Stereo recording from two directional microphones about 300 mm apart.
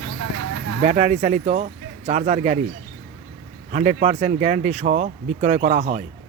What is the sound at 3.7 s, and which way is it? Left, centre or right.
Speech, right.